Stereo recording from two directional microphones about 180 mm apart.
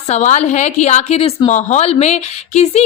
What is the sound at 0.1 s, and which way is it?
A woman's voice, 40° left (ahead or behind).